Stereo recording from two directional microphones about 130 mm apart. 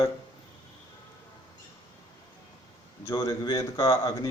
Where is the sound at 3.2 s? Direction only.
25° left (ahead or behind).